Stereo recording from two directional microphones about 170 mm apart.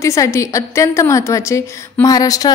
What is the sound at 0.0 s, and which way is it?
A woman's voice, 15° left (ahead or behind).